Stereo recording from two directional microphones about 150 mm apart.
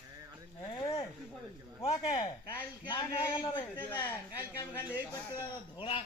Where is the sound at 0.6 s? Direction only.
30° left (ahead or behind).